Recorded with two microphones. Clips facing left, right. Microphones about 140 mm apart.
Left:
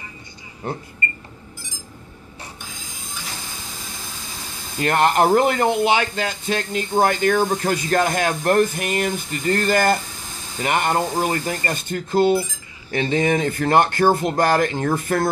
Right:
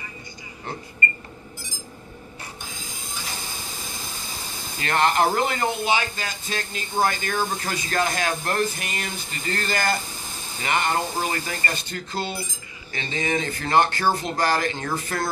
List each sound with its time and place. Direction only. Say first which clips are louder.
4.8 s speech: left 4 dB; 50° left (ahead or behind)